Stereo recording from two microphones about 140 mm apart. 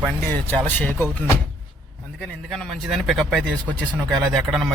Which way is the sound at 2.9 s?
Centre (ahead or behind).